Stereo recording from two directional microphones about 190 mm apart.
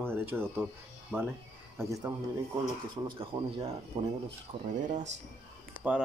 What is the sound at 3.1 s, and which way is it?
Speech, 30° right (ahead or behind).